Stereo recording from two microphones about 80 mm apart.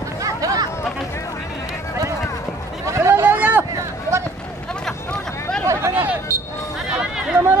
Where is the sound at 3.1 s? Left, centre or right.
Right.